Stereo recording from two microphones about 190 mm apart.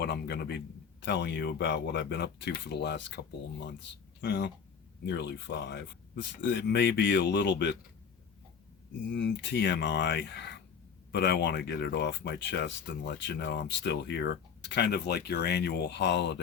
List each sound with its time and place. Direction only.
0.0 s a sound: 60° left (ahead or behind)
1.0 s speech: 60° left (ahead or behind)
4.2 s speech: 65° left (ahead or behind)
9.0 s speech: 70° left (ahead or behind)